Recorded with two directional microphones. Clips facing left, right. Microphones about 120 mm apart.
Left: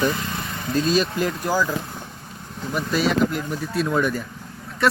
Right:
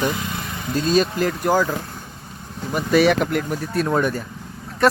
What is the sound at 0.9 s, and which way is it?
Speech, 45° right (ahead or behind).